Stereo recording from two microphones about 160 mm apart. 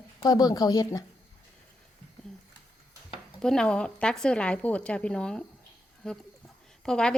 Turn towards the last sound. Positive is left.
turn(degrees=5)  # may be behind; listen again after turning